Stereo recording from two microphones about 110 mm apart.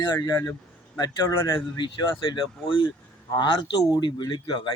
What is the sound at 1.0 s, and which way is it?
Speech, 35° left (ahead or behind).